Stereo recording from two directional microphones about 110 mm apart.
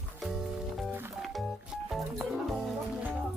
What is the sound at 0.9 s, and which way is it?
Music, 20° right (ahead or behind).